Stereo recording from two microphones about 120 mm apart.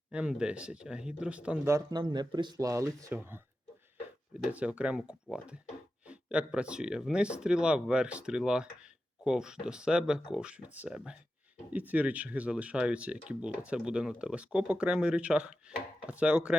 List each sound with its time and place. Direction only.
0.1 s speech: 10° right (ahead or behind)
1.9 s speech: 35° right (ahead or behind)
4.4 s speech: 10° right (ahead or behind)